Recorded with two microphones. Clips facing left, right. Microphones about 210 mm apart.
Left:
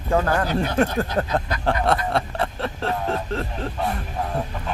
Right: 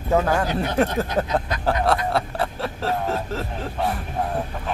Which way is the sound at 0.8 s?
20° right (ahead or behind).